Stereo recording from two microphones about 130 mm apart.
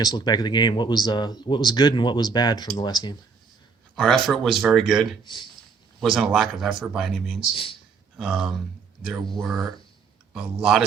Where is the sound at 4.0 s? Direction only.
Centre (ahead or behind).